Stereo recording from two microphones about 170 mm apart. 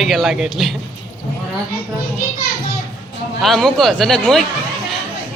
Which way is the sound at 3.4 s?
Centre (ahead or behind).